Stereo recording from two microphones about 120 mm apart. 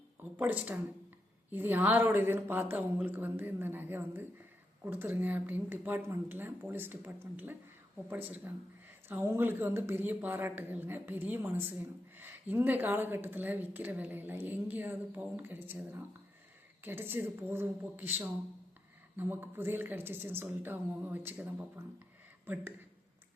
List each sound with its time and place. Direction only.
0.3 s a woman's voice: 10° right (ahead or behind)
16.8 s a woman's voice: 20° right (ahead or behind)